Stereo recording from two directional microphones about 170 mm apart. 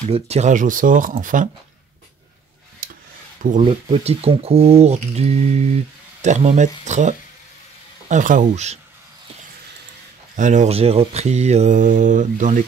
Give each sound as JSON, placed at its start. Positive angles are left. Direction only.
{"t": 0.1, "sound": "speech", "side_deg": -40}
{"t": 2.8, "sound": "a sound", "side_deg": -55}
{"t": 3.6, "sound": "speech", "side_deg": -35}
{"t": 10.3, "sound": "speech", "side_deg": -45}